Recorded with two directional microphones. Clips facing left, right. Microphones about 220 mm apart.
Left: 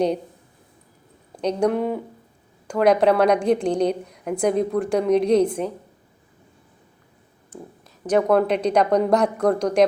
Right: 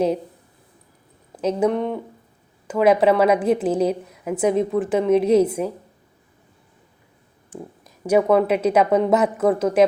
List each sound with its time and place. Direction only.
1.4 s a woman's voice: 5° right (ahead or behind)
7.5 s a woman's voice: 10° right (ahead or behind)